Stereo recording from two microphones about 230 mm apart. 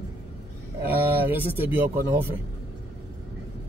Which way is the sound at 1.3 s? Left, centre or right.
Centre.